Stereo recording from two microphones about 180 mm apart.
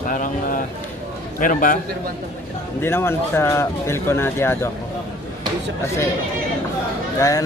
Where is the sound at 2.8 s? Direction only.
15° left (ahead or behind).